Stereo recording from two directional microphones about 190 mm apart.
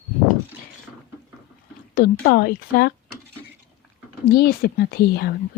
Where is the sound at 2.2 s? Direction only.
50° left (ahead or behind).